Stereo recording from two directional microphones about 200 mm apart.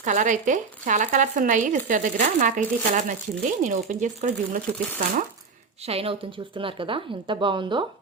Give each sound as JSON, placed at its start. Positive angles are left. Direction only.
{"t": 0.0, "sound": "speech", "side_deg": -40}